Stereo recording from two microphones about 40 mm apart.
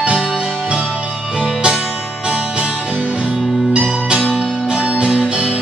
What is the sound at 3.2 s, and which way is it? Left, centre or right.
Music, right.